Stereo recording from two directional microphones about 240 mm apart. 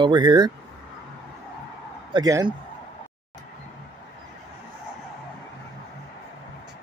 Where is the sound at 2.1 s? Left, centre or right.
Centre.